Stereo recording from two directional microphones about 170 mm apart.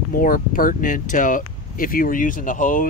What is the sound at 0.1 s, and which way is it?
Speech, 55° left (ahead or behind).